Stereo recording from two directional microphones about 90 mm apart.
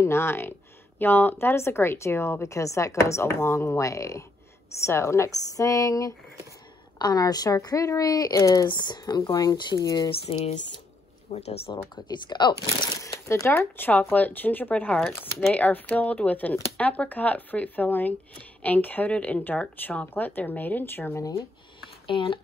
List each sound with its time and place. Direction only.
0.0 s speech: 30° left (ahead or behind)
8.6 s speech: 55° left (ahead or behind)
10.0 s speech: 85° left
11.9 s speech: 55° left (ahead or behind)
12.8 s crumpling: 45° left (ahead or behind)
13.3 s speech: 30° left (ahead or behind)
15.0 s speech: 5° left (ahead or behind)
15.5 s speech: 15° left (ahead or behind)
21.2 s speech: 35° left (ahead or behind)
22.0 s speech: 75° left (ahead or behind)